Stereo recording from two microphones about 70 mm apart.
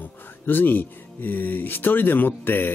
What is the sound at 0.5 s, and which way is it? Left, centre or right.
Speech, left.